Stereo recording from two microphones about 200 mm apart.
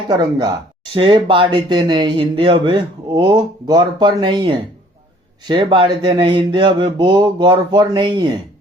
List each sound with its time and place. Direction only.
0.1 s speech: 20° right (ahead or behind)